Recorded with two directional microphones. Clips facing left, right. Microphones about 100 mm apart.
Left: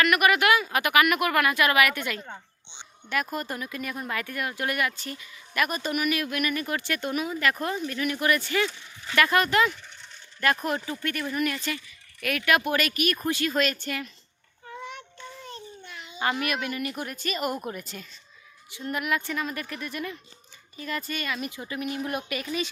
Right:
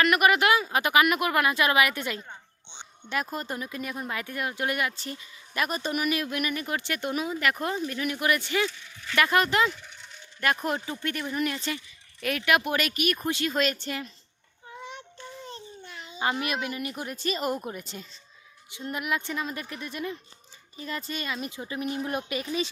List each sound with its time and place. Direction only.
0.0 s speech: 25° right (ahead or behind)
14.7 s child singing: 15° right (ahead or behind)
15.4 s babbling: 25° right (ahead or behind)
16.2 s speech: 20° right (ahead or behind)